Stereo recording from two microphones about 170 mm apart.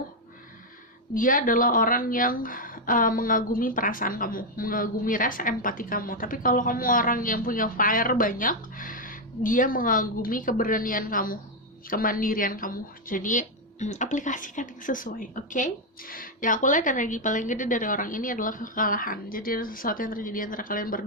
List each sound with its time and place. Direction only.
1.1 s speech: 55° left (ahead or behind)